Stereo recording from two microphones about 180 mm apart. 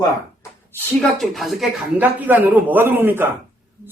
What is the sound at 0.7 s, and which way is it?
Speech, 5° left (ahead or behind).